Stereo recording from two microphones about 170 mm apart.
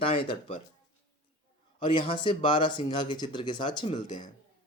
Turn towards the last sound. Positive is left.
turn(degrees=30)  # may be behind; listen again after turning